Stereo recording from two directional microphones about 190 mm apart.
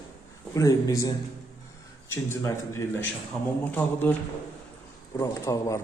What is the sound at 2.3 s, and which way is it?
A man's voice, 15° left (ahead or behind).